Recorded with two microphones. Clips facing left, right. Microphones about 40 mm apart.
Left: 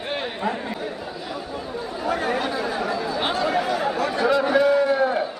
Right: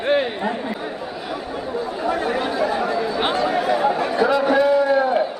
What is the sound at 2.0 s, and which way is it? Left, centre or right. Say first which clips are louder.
Speech: right 1 dB; right.